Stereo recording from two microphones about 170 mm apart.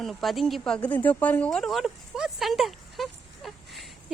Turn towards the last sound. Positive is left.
turn(degrees=0)  # may be behind; listen again after turning